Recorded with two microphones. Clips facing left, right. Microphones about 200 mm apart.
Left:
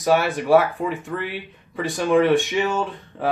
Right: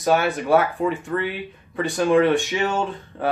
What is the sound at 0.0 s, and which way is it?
Speech, centre (ahead or behind).